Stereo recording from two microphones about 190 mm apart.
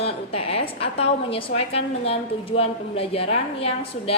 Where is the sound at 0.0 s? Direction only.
30° left (ahead or behind).